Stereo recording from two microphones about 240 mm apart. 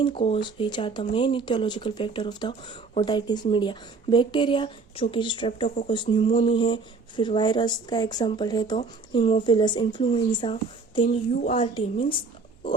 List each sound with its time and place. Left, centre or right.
0.0 s speech: left